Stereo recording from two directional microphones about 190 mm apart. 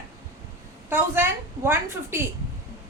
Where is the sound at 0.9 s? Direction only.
10° right (ahead or behind).